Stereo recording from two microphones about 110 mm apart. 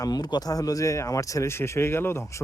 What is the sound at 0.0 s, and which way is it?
Speech, 40° left (ahead or behind).